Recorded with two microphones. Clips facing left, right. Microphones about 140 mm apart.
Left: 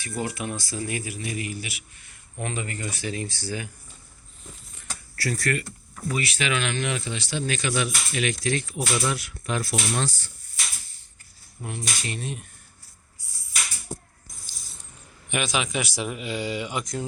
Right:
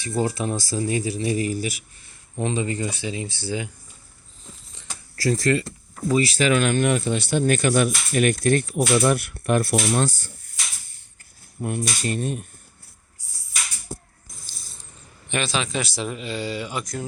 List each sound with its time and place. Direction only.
0.0 s speech: 30° right (ahead or behind)
2.4 s speech: 25° right (ahead or behind)
5.3 s speech: 25° right (ahead or behind); by 10.3 s 50° right (ahead or behind)
11.6 s speech: 50° right (ahead or behind)
15.3 s a man's voice: 10° left (ahead or behind)